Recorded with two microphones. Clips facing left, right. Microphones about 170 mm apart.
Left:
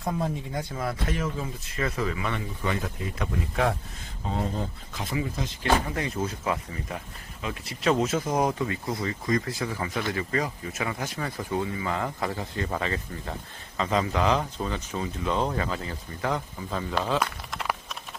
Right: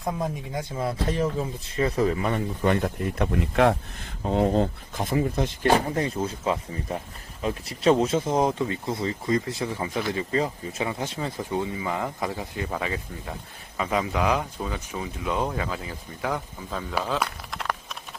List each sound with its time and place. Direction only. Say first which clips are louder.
0.2 s speech: even; 20° right (ahead or behind)
1.0 s speech: right 4 dB; 35° right (ahead or behind)
2.6 s speech: right 6 dB; 55° right (ahead or behind)
4.9 s speech: right 6 dB; 50° right (ahead or behind)
5.7 s speech: even; 35° right (ahead or behind); by 17.9 s centre (ahead or behind)